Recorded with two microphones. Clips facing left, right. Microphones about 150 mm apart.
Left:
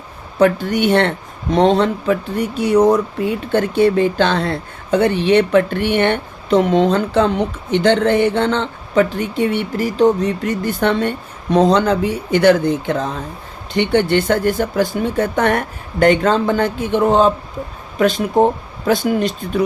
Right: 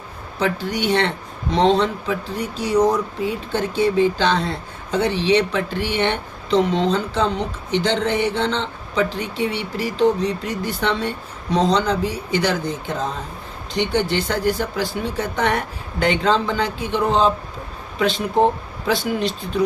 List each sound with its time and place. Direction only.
0.3 s speech: 55° left (ahead or behind)